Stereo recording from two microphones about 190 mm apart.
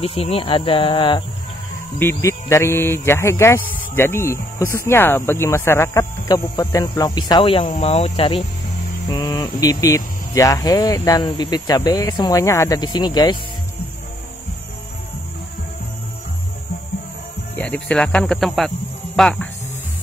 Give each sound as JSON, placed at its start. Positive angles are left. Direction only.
{"t": 0.0, "sound": "speech", "side_deg": 30}
{"t": 2.0, "sound": "speech", "side_deg": 15}
{"t": 17.6, "sound": "speech", "side_deg": 5}